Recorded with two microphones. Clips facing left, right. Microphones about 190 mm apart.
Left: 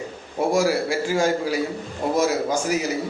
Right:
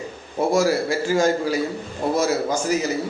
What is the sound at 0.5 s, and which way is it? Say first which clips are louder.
A man's voice: right 1 dB; 10° left (ahead or behind).